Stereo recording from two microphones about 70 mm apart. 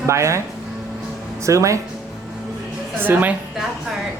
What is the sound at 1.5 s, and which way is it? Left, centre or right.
Speech, right.